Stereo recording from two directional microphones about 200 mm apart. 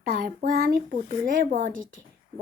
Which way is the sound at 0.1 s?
45° right (ahead or behind).